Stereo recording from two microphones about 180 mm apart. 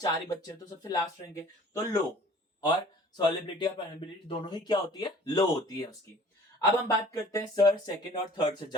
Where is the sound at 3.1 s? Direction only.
25° left (ahead or behind).